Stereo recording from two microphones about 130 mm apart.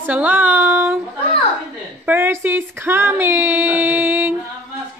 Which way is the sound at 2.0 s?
15° right (ahead or behind).